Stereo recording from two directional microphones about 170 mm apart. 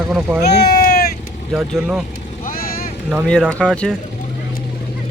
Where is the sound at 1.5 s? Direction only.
5° right (ahead or behind).